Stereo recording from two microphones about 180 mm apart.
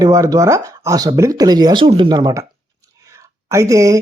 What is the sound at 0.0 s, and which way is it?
Speech, 20° right (ahead or behind).